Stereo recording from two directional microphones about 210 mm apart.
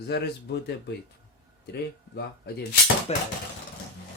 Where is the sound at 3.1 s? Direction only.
30° left (ahead or behind).